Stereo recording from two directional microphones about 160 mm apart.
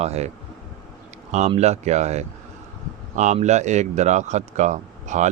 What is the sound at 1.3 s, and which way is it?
Speech, 45° right (ahead or behind).